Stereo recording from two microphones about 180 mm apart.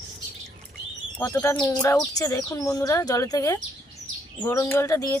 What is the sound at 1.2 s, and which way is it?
Speech, 15° left (ahead or behind).